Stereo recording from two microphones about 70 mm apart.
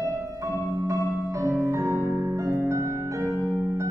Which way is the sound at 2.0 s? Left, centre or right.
Right.